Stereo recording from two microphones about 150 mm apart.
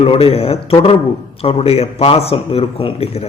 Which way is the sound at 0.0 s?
40° left (ahead or behind).